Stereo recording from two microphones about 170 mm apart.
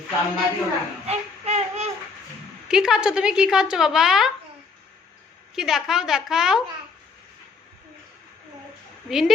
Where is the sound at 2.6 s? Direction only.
5° right (ahead or behind).